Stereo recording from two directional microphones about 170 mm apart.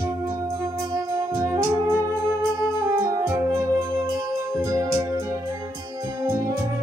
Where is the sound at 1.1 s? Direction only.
20° right (ahead or behind).